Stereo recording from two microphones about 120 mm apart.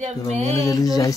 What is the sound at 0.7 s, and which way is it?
Speech, 30° left (ahead or behind).